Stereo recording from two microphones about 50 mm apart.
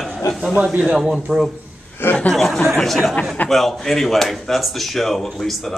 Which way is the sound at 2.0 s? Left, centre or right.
Left.